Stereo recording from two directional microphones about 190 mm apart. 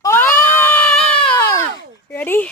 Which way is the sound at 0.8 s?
5° left (ahead or behind).